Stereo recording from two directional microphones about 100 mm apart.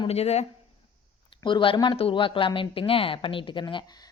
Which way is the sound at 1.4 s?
55° left (ahead or behind).